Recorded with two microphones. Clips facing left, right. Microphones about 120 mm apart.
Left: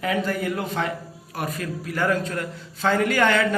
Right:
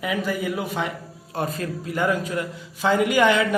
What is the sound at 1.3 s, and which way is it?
Speech, 30° right (ahead or behind).